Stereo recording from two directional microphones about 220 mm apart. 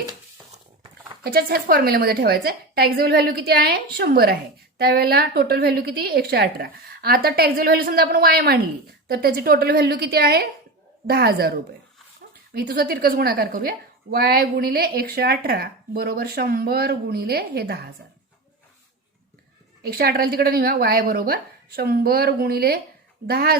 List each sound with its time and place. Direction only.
1.2 s a woman's voice: 45° right (ahead or behind)
12.5 s a woman's voice: 45° right (ahead or behind)
20.0 s a woman's voice: 45° right (ahead or behind)